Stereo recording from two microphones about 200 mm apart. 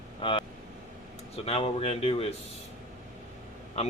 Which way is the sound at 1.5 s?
30° left (ahead or behind).